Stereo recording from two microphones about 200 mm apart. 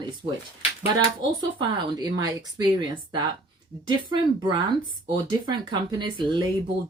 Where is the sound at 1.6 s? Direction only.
20° right (ahead or behind).